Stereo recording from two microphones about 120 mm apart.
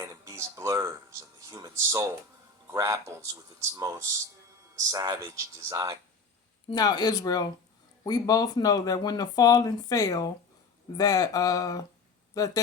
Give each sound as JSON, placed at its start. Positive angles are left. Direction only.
{"t": 0.0, "sound": "speech", "side_deg": -25}
{"t": 6.7, "sound": "speech", "side_deg": 35}